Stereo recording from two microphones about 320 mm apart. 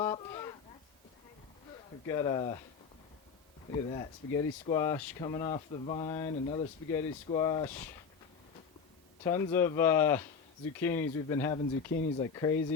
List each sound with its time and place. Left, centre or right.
0.0 s a sound: centre
2.0 s speech: centre
3.7 s speech: centre
9.2 s speech: centre